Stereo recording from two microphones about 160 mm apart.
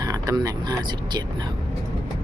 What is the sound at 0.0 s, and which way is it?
Speech, 25° right (ahead or behind).